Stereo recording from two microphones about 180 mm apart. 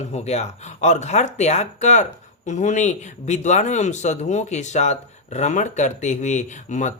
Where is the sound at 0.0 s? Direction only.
35° left (ahead or behind).